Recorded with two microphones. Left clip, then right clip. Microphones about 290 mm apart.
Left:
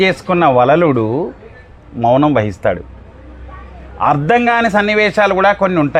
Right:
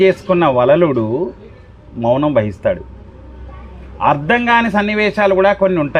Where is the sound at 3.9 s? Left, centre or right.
Left.